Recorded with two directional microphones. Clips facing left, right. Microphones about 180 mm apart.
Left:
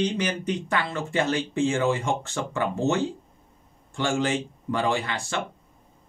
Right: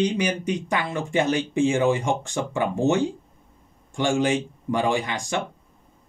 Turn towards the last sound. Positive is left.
turn(degrees=-15)  # may be behind; listen again after turning